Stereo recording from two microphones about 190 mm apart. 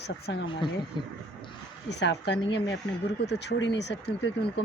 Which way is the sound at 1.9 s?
65° left (ahead or behind).